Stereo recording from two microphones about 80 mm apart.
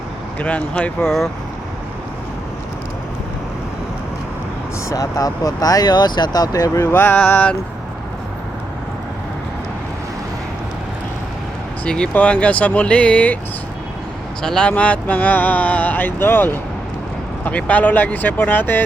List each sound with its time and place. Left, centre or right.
0.3 s speech: centre
4.9 s speech: left
6.8 s speech: left
11.9 s speech: centre
14.4 s speech: centre
14.7 s speech: centre